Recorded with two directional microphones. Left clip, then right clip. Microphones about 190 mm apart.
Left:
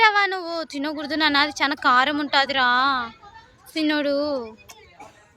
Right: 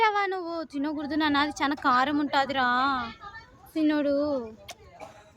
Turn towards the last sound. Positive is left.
turn(degrees=-5)  # may be behind; listen again after turning